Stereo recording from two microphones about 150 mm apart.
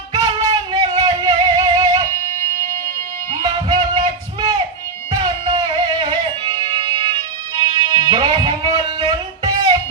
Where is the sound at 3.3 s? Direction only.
30° right (ahead or behind).